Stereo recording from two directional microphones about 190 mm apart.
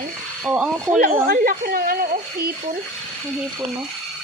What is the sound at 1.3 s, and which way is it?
Speech, 50° right (ahead or behind).